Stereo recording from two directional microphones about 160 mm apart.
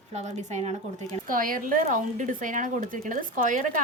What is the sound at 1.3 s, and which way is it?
A woman's voice, 60° right (ahead or behind).